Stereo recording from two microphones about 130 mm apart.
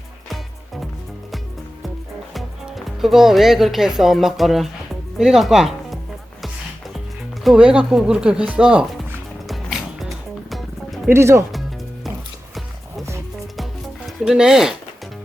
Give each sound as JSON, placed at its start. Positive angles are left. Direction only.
{"t": 0.3, "sound": "music", "side_deg": 0}
{"t": 2.3, "sound": "speech", "side_deg": 0}
{"t": 6.4, "sound": "music", "side_deg": 0}
{"t": 7.4, "sound": "speech", "side_deg": -5}
{"t": 9.5, "sound": "music", "side_deg": 0}
{"t": 11.1, "sound": "speech", "side_deg": -20}
{"t": 14.3, "sound": "speech", "side_deg": -5}